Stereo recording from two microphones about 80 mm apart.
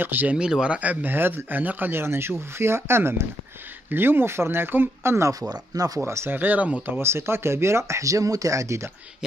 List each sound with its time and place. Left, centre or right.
0.0 s speech: right
0.4 s speech: centre; by 5.3 s right
5.5 s speech: right
5.9 s speech: right
6.3 s speech: right
7.0 s speech: right